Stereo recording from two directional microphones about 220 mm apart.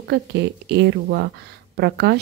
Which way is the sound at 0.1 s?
50° right (ahead or behind).